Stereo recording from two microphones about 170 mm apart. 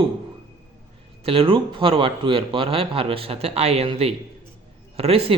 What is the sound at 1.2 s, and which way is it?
Speech, 35° right (ahead or behind).